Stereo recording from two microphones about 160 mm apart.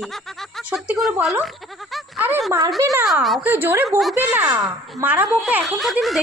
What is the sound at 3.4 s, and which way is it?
Speech, 15° right (ahead or behind).